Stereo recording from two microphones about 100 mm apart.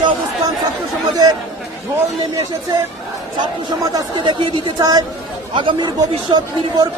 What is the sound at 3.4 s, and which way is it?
A woman's voice, 45° right (ahead or behind).